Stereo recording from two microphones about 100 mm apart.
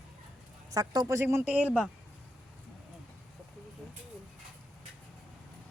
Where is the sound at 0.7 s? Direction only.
40° right (ahead or behind).